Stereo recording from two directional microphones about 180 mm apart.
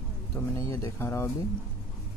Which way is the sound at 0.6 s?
15° left (ahead or behind).